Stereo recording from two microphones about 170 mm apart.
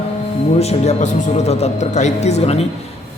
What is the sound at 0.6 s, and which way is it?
Speech, 40° left (ahead or behind).